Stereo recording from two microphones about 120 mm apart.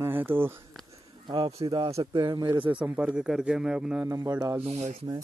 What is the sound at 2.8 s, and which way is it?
Speech, 10° right (ahead or behind).